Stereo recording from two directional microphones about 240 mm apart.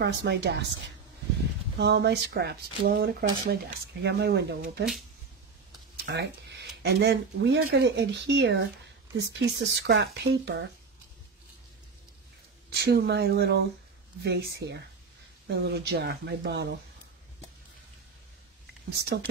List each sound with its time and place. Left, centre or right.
0.0 s speech: right
1.8 s speech: right
6.1 s speech: right
12.6 s speech: right
18.9 s speech: right